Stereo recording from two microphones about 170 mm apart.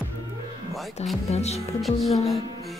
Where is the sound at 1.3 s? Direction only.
40° left (ahead or behind).